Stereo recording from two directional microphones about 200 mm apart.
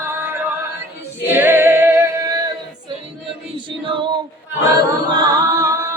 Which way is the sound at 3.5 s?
25° right (ahead or behind).